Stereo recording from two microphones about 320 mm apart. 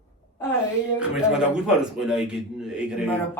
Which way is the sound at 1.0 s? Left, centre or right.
Centre.